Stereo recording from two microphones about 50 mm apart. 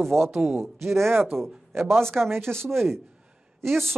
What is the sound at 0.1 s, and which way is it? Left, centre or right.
Speech, right.